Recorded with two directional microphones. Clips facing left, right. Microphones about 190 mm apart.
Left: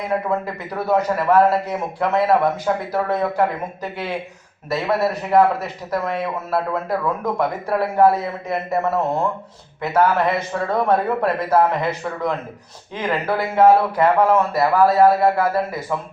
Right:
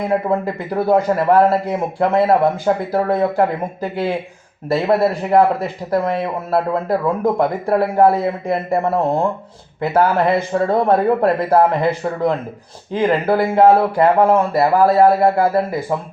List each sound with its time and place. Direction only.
0.1 s a man's voice: 30° right (ahead or behind)